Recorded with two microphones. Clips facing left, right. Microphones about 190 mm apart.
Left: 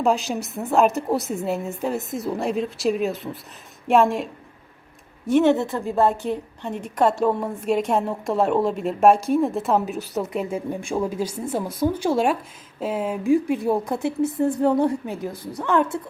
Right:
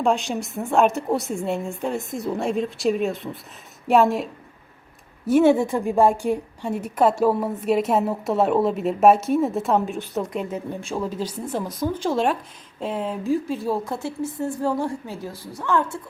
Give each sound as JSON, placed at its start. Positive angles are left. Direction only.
{"t": 0.0, "sound": "a woman's voice", "side_deg": 0}